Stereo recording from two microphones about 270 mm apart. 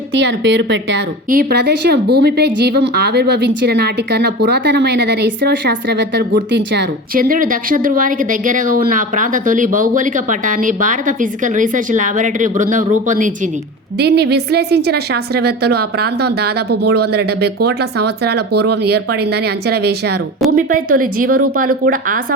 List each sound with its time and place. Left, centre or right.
0.1 s a woman's voice: right